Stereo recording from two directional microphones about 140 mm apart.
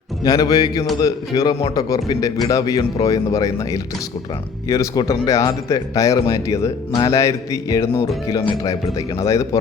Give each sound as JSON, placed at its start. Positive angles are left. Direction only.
{"t": 0.3, "sound": "speech", "side_deg": 25}